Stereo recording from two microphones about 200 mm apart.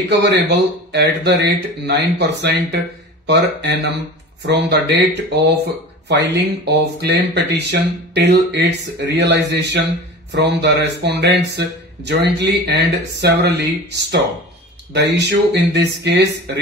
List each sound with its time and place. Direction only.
0.1 s speech: 60° right (ahead or behind)